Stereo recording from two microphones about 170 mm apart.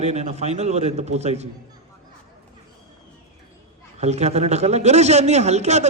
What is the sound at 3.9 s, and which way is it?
A man's voice, 40° right (ahead or behind).